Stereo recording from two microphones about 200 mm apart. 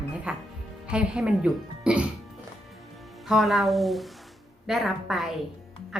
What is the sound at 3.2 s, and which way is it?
A woman's voice, centre (ahead or behind).